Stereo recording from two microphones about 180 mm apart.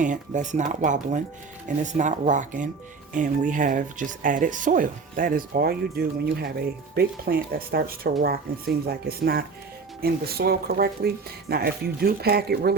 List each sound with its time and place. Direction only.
0.0 s speech: 45° right (ahead or behind); by 12.7 s 60° right (ahead or behind)